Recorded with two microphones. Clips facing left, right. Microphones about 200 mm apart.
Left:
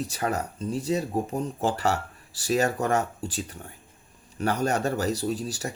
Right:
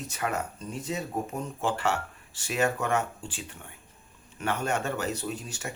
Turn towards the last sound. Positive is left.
turn(degrees=35)  # may be behind; listen again after turning